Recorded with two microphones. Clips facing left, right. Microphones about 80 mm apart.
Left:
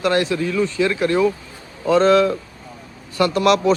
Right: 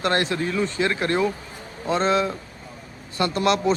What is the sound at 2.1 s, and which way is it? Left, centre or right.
Speech, left.